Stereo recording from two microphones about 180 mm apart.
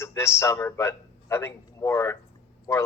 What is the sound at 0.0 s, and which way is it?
A man's voice, 15° left (ahead or behind).